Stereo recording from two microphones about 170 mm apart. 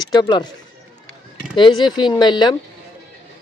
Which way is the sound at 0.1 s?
25° left (ahead or behind).